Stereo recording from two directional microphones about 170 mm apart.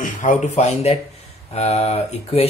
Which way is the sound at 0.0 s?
45° left (ahead or behind).